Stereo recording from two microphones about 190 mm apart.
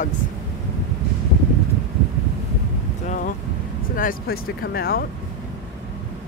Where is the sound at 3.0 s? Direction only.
45° left (ahead or behind).